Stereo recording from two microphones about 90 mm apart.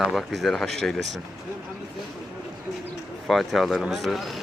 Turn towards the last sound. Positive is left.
turn(degrees=0)  # may be behind; listen again after turning